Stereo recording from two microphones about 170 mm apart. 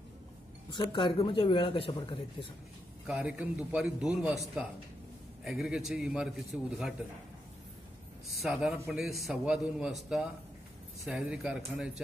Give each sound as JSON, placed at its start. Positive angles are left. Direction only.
{"t": 0.7, "sound": "a man's voice", "side_deg": 30}
{"t": 3.1, "sound": "a man's voice", "side_deg": -5}
{"t": 8.3, "sound": "a man's voice", "side_deg": 0}
{"t": 11.1, "sound": "a man's voice", "side_deg": -5}